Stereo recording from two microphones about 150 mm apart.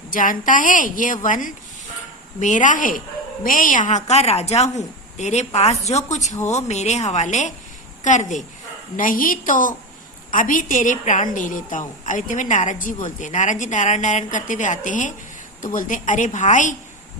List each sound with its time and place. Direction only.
0.1 s a woman's voice: 65° left (ahead or behind)
9.0 s a woman's voice: 65° left (ahead or behind)